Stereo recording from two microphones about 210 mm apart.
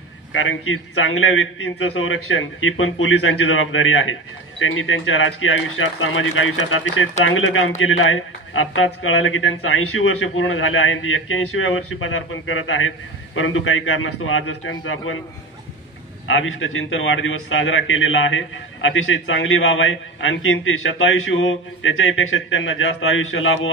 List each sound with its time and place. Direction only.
0.3 s speech: 70° left (ahead or behind)
16.3 s speech: 70° left (ahead or behind)